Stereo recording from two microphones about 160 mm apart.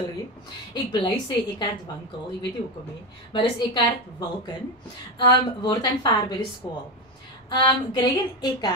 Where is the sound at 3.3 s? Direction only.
25° left (ahead or behind).